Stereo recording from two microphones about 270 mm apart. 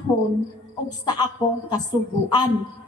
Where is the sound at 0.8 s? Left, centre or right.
Centre.